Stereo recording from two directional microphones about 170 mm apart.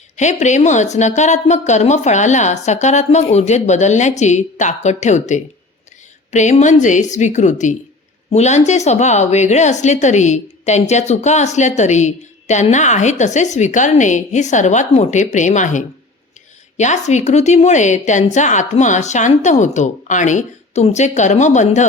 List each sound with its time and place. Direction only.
0.2 s a woman's voice: 45° left (ahead or behind)